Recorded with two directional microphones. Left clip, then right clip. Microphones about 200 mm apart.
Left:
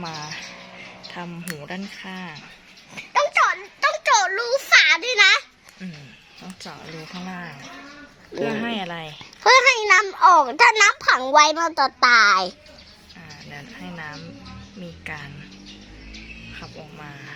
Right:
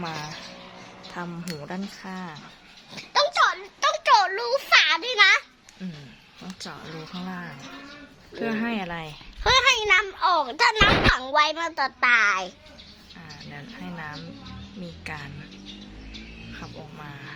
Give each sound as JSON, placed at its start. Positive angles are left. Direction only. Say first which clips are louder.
{"t": 0.0, "sound": "speech", "louder": "even", "side_deg": 0}
{"t": 1.5, "sound": "speech", "louder": "left 2 dB", "side_deg": 0}
{"t": 2.9, "sound": "a sound", "louder": "left 3 dB", "side_deg": 0}
{"t": 7.3, "sound": "speech", "louder": "left 2 dB", "side_deg": 0}
{"t": 9.4, "sound": "a woman's voice", "louder": "left 5 dB", "side_deg": 40}
{"t": 11.2, "sound": "a child's voice", "louder": "left 6 dB", "side_deg": 60}
{"t": 13.5, "sound": "speech", "louder": "left 3 dB", "side_deg": 0}
{"t": 15.0, "sound": "a sound", "louder": "left 2 dB", "side_deg": 0}